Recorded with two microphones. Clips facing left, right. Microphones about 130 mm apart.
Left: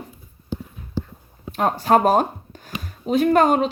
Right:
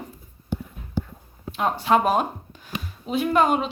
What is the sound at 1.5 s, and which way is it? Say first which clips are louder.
Speech: left 3 dB; 45° left (ahead or behind).